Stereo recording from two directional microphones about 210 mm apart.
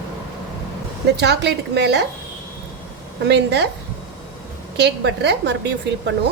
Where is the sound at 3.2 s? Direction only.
55° right (ahead or behind).